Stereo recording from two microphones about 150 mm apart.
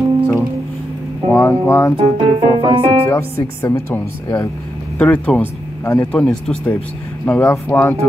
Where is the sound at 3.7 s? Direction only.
15° left (ahead or behind).